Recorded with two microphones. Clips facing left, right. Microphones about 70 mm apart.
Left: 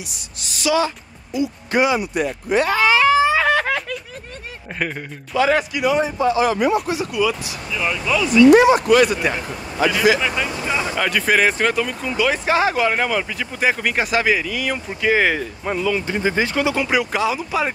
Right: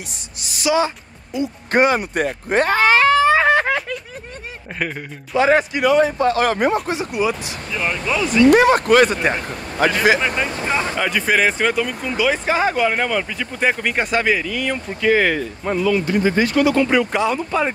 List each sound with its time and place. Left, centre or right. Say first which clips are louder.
0.6 s speech: right 1 dB; right
3.3 s snicker: right 2 dB; right
3.6 s a sound: right 2 dB; centre
5.3 s speech: right 2 dB; right
5.9 s speech: right 3 dB; right
9.5 s a man's voice: right 1 dB; right
11.0 s speech: left 2 dB; centre
15.9 s speech: right 4 dB; left
16.8 s speech: right 2 dB; centre